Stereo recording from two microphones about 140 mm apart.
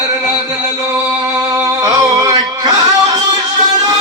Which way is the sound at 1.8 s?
25° right (ahead or behind).